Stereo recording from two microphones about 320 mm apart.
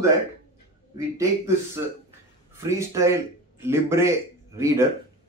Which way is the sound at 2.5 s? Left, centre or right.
Centre.